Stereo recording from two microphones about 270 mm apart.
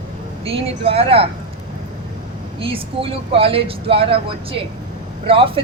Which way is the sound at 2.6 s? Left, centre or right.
Centre.